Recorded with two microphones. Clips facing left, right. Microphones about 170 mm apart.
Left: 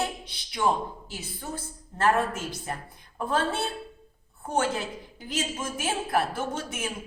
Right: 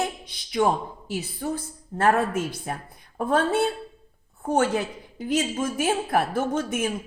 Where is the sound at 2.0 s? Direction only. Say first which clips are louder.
Right 3 dB; 55° right (ahead or behind).